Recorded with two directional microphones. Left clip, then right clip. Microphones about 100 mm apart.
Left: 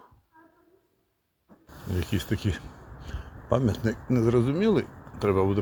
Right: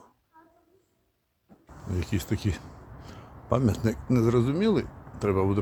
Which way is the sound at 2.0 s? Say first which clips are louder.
Left 1 dB; centre (ahead or behind).